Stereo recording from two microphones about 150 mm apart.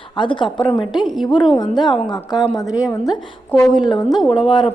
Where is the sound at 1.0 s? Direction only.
Centre (ahead or behind).